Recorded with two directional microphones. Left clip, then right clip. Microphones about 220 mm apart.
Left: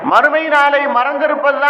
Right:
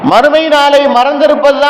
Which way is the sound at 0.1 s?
55° right (ahead or behind).